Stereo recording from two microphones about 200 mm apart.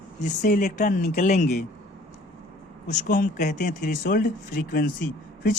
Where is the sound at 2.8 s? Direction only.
40° left (ahead or behind).